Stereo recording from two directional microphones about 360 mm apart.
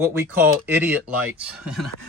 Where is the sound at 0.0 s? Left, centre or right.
Centre.